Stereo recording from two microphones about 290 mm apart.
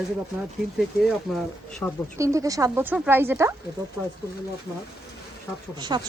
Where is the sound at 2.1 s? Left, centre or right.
Centre.